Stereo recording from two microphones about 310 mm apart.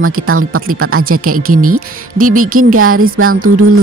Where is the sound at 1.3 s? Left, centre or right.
Right.